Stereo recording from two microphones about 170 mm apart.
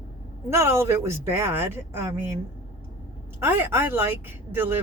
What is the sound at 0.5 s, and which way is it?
A woman's voice, 15° right (ahead or behind).